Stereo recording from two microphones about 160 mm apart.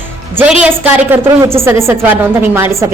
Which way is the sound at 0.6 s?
15° right (ahead or behind).